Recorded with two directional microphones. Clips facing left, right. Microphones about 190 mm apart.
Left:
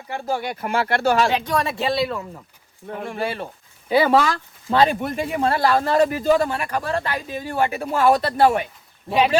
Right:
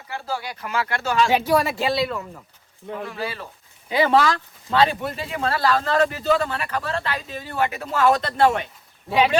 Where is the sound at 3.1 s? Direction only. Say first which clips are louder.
Left 4 dB; 55° left (ahead or behind).